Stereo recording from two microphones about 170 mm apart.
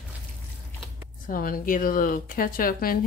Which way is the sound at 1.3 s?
55° left (ahead or behind).